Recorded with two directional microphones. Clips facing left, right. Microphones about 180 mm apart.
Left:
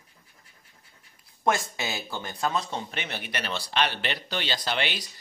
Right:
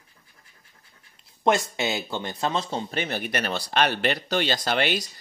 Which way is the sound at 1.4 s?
25° right (ahead or behind).